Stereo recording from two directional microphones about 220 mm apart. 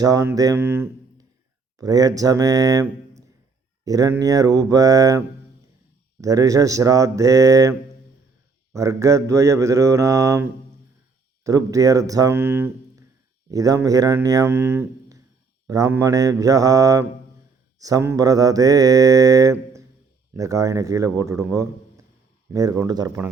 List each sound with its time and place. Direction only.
0.0 s mantra: 15° right (ahead or behind)
3.8 s mantra: 15° right (ahead or behind)
6.2 s mantra: 15° right (ahead or behind)
11.4 s mantra: 15° right (ahead or behind)